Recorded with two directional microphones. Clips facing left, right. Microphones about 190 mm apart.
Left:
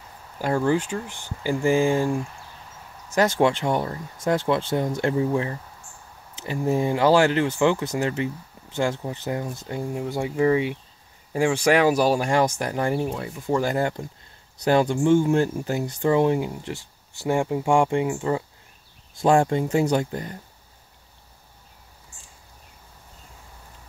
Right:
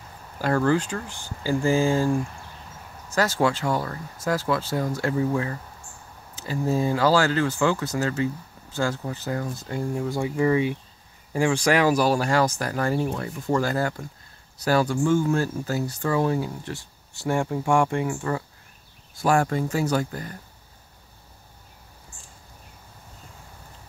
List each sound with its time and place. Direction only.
0.4 s speech: 15° left (ahead or behind)
3.2 s speech: 20° left (ahead or behind)